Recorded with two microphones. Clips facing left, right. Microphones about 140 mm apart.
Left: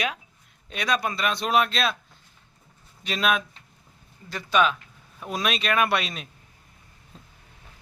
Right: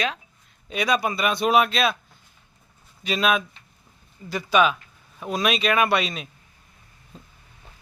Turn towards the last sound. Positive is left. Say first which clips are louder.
# right 2 dB
turn(degrees=0)  # may be behind; listen again after turning